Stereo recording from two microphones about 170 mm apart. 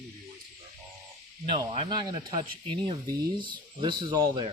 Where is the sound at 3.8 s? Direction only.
25° right (ahead or behind).